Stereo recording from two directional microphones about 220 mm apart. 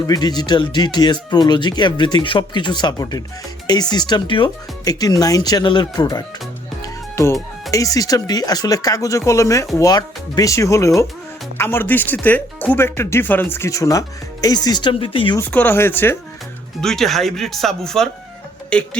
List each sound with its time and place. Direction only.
0.1 s speech: 20° left (ahead or behind)
6.8 s music: 15° left (ahead or behind)
7.7 s speech: 15° left (ahead or behind)
15.4 s speech: 10° left (ahead or behind)